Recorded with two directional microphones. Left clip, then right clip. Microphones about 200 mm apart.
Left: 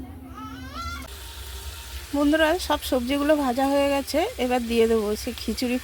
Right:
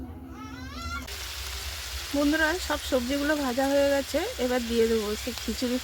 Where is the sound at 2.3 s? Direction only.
15° left (ahead or behind).